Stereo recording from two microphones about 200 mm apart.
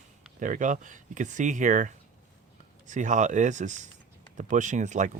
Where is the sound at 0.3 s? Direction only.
40° right (ahead or behind).